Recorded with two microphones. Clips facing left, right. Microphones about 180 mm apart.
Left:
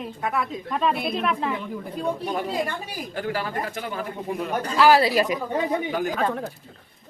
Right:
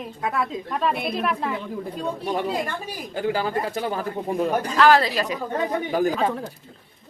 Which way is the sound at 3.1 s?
25° right (ahead or behind).